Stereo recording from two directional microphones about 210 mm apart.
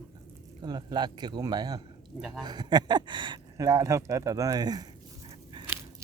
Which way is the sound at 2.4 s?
20° right (ahead or behind).